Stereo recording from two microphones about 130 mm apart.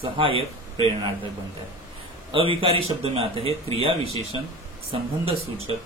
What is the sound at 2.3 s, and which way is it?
Speech, 40° right (ahead or behind).